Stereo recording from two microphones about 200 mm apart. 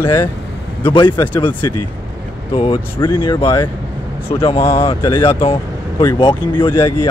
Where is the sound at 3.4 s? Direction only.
10° left (ahead or behind).